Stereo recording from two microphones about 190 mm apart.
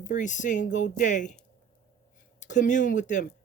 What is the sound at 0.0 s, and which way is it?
Speech, 40° left (ahead or behind).